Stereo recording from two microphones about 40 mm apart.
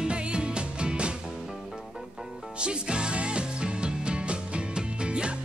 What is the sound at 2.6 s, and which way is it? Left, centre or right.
Music, right.